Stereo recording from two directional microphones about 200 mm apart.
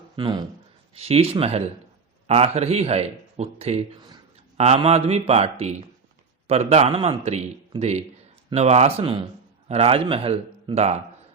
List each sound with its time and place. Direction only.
0.2 s a man's voice: 25° right (ahead or behind)